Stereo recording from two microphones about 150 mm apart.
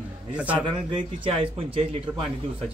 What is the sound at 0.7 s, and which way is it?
A man's voice, 30° right (ahead or behind).